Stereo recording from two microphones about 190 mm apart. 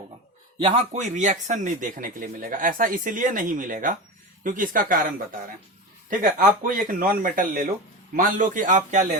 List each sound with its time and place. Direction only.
0.9 s speech: 40° right (ahead or behind)
6.1 s speech: 45° right (ahead or behind)